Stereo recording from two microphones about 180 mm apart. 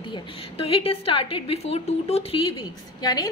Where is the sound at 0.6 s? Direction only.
35° left (ahead or behind).